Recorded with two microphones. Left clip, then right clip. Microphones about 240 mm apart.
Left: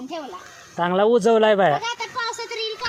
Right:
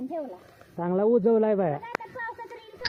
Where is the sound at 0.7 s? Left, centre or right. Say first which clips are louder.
Left 6 dB; centre.